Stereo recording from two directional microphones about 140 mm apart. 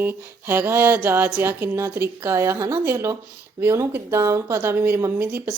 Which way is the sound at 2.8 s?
20° right (ahead or behind).